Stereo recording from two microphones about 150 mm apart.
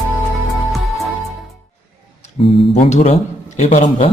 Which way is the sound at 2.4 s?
40° left (ahead or behind).